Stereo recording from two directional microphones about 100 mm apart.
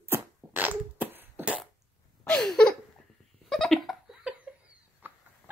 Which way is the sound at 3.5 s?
5° left (ahead or behind).